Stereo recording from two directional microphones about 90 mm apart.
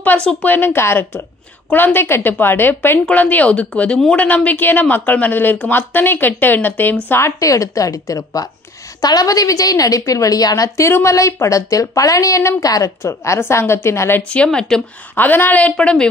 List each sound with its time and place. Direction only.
0.0 s a woman's voice: 15° left (ahead or behind)
14.3 s speech: 10° left (ahead or behind)
15.1 s speech: 20° left (ahead or behind)